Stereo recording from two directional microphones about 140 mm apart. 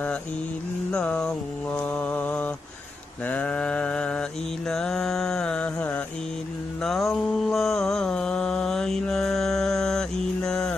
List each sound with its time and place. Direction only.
0.9 s mantra: 5° left (ahead or behind)